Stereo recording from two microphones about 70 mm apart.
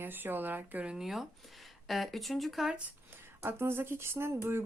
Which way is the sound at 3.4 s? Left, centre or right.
Right.